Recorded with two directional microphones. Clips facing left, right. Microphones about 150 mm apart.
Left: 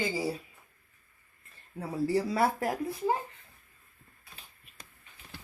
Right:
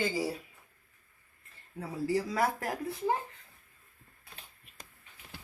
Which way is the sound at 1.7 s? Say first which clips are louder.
Left 3 dB; 30° left (ahead or behind).